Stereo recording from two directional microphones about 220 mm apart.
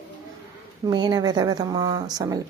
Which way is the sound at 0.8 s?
20° right (ahead or behind).